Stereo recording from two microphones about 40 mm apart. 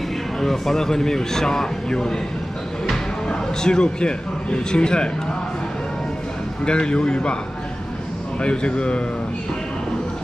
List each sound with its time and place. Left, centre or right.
0.4 s a man's voice: centre
3.3 s a man's voice: centre
6.6 s a man's voice: left
8.4 s a man's voice: left